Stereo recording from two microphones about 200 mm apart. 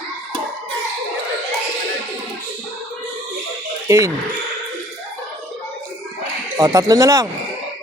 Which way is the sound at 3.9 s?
15° right (ahead or behind).